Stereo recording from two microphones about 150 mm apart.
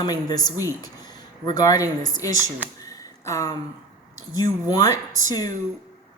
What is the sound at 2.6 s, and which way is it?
Speech, 10° right (ahead or behind).